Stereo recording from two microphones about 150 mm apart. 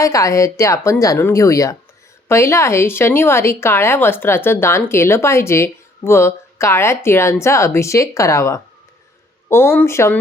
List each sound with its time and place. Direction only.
0.0 s a woman's voice: 20° left (ahead or behind)